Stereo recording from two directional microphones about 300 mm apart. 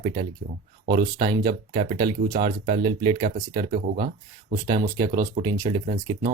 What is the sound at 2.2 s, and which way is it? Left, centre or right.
Speech, right.